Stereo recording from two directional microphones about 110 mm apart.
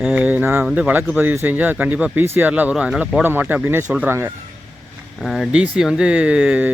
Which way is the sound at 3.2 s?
20° right (ahead or behind).